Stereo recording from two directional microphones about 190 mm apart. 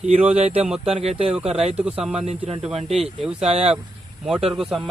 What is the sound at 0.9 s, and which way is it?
Speech, 30° right (ahead or behind).